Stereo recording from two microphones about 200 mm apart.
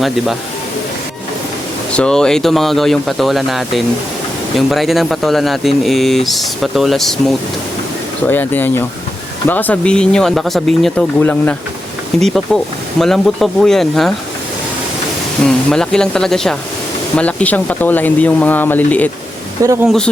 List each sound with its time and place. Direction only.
1.9 s speech: 5° left (ahead or behind)
15.4 s speech: 5° left (ahead or behind)
19.6 s speech: 15° right (ahead or behind)